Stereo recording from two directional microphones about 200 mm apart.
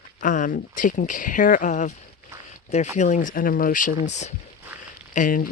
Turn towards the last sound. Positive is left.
turn(degrees=40)  # may be behind; listen again after turning